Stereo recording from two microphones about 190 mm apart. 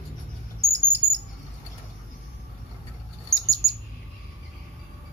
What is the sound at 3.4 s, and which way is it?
Bird, 15° right (ahead or behind).